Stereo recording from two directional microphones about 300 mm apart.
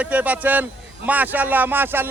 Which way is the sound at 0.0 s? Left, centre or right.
Centre.